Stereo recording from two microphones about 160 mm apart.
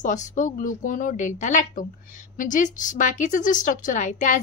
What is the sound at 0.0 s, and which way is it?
A woman's voice, 50° left (ahead or behind).